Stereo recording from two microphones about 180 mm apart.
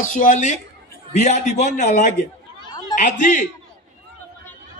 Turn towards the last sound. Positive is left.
turn(degrees=45)  # may be behind; listen again after turning